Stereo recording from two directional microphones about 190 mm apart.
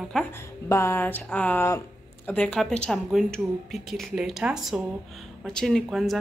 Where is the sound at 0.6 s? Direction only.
15° left (ahead or behind).